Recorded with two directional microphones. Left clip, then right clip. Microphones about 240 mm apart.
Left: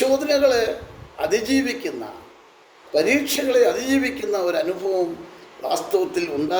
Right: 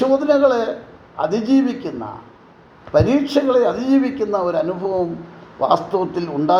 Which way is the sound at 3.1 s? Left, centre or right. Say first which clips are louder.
Right 3 dB; centre.